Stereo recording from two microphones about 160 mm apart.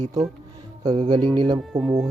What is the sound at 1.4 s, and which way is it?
Speech, 25° right (ahead or behind).